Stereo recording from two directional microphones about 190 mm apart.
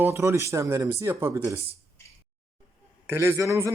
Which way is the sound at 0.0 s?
15° right (ahead or behind).